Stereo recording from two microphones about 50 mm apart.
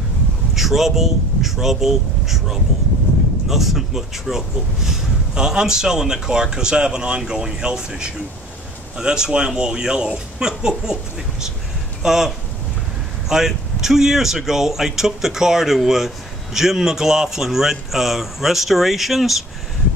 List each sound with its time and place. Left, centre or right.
0.6 s speech: centre
12.0 s speech: centre